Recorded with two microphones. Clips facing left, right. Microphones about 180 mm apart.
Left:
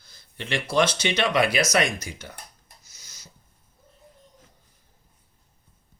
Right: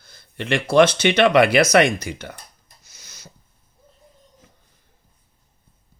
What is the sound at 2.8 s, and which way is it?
Rub, 60° right (ahead or behind).